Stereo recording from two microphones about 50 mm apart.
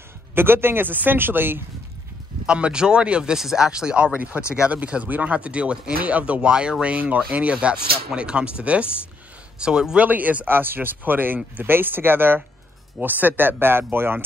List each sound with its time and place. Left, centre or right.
0.3 s speech: right
2.4 s speech: centre
3.3 s speech: centre
10.0 s speech: right